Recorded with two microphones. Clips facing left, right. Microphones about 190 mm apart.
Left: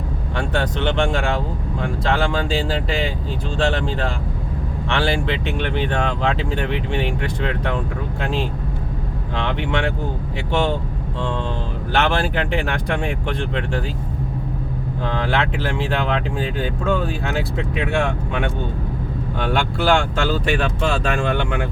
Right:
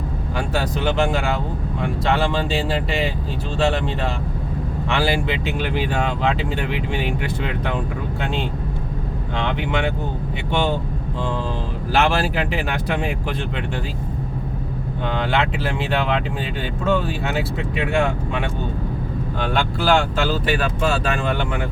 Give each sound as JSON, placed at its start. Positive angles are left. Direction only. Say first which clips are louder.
{"t": 0.3, "sound": "speech", "louder": "left 1 dB", "side_deg": -5}
{"t": 11.9, "sound": "speech", "louder": "even", "side_deg": -5}
{"t": 15.0, "sound": "speech", "louder": "even", "side_deg": 0}